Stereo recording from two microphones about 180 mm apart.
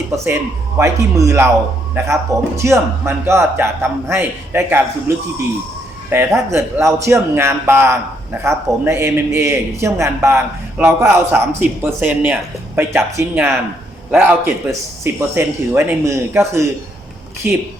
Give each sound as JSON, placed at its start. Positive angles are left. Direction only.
{"t": 0.8, "sound": "a man's voice", "side_deg": -15}
{"t": 2.6, "sound": "a man's voice", "side_deg": -15}